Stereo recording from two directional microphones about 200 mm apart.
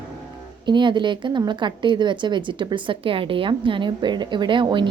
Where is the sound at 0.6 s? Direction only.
25° right (ahead or behind).